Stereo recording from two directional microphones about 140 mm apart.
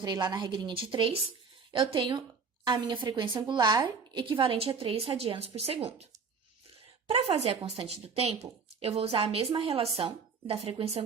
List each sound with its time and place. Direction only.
0.0 s a woman's voice: 30° right (ahead or behind)
7.1 s a woman's voice: 45° right (ahead or behind)